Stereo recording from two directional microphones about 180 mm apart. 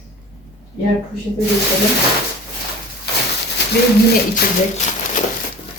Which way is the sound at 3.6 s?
70° left (ahead or behind).